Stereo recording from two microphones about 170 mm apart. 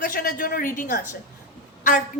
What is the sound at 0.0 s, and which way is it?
A woman's voice, 60° left (ahead or behind).